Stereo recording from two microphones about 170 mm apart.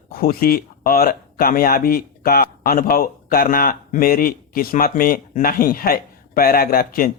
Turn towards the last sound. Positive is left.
turn(degrees=60)  # may be behind; listen again after turning